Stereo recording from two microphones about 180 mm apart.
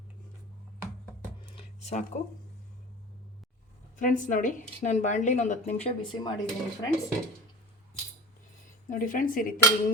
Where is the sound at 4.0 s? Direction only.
45° left (ahead or behind).